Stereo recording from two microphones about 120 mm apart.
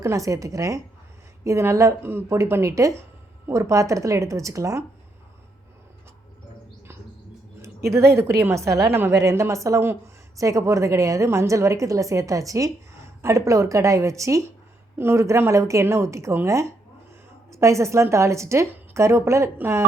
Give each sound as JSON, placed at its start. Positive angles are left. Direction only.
{"t": 0.0, "sound": "a woman's voice", "side_deg": -25}
{"t": 7.6, "sound": "a woman's voice", "side_deg": -25}